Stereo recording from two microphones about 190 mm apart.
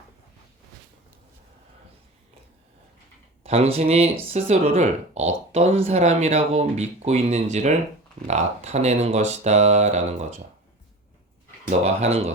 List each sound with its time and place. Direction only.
3.4 s speech: 30° right (ahead or behind)
11.7 s speech: 35° right (ahead or behind)